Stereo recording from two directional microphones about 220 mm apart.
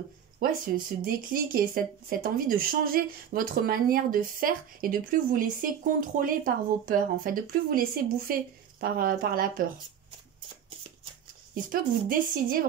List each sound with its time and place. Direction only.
0.4 s speech: 40° right (ahead or behind)
11.7 s speech: 40° right (ahead or behind)